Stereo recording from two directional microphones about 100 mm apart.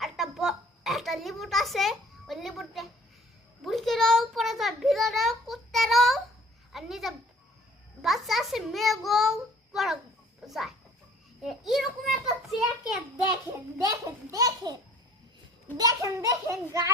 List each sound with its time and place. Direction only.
0.0 s oink: centre (ahead or behind)
3.6 s a child's voice: centre (ahead or behind)
11.4 s a sound: centre (ahead or behind)
13.7 s a child's voice: 30° right (ahead or behind)
15.8 s a child's voice: 35° right (ahead or behind)